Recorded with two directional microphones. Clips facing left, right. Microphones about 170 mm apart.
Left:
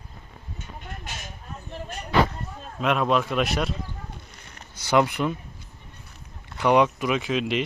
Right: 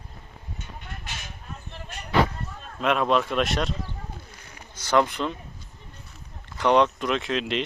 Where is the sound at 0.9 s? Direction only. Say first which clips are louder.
Left 3 dB; 45° left (ahead or behind).